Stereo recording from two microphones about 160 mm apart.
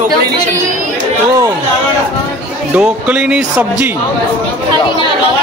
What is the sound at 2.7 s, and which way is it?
Speech, 10° right (ahead or behind).